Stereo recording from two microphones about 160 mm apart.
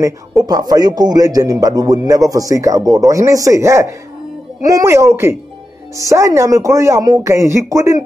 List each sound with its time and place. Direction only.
0.0 s speech: 20° right (ahead or behind)